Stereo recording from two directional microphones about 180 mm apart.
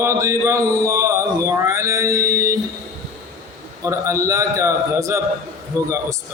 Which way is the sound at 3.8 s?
15° right (ahead or behind).